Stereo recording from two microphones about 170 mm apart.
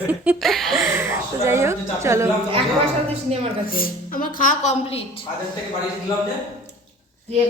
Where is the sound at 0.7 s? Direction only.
15° right (ahead or behind).